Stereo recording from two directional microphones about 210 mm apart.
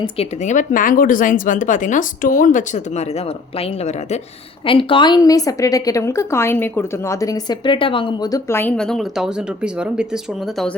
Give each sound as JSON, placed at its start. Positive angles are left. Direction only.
{"t": 0.0, "sound": "a woman's voice", "side_deg": 30}